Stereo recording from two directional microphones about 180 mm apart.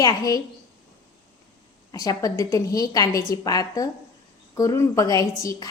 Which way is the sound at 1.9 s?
20° left (ahead or behind).